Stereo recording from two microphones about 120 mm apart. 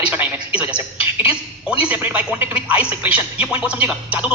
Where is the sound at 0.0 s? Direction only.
15° right (ahead or behind).